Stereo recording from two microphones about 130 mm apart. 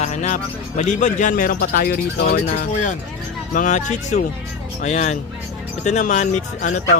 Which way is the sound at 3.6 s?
70° left (ahead or behind).